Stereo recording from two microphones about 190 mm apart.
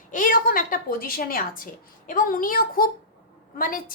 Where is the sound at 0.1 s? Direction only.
45° left (ahead or behind).